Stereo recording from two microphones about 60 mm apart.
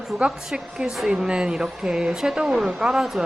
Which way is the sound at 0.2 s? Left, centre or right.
Centre.